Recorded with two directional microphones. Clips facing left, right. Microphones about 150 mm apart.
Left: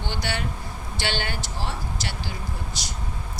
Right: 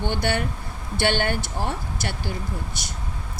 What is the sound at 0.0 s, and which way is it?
A woman's voice, 55° right (ahead or behind).